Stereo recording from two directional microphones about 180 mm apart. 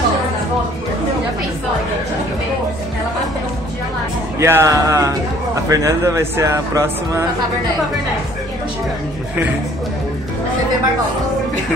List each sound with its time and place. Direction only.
4.4 s speech: 15° right (ahead or behind)